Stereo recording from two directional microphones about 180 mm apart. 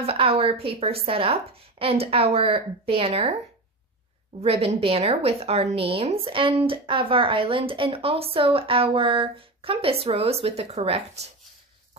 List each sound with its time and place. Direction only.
0.0 s a woman's voice: 30° right (ahead or behind)
4.4 s a woman's voice: 35° right (ahead or behind)